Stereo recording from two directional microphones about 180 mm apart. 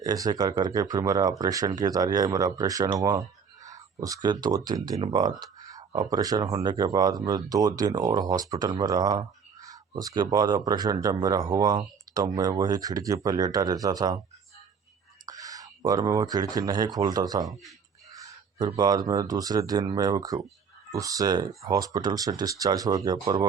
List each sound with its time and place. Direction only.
0.0 s speech: 20° right (ahead or behind)
15.3 s speech: 20° right (ahead or behind)